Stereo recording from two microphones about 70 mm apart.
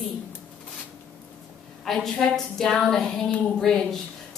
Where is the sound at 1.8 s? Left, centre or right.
Centre.